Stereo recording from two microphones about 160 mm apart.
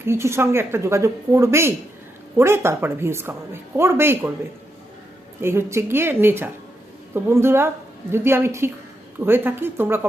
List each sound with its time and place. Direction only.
0.0 s speech: 15° right (ahead or behind)
5.4 s speech: 15° right (ahead or behind)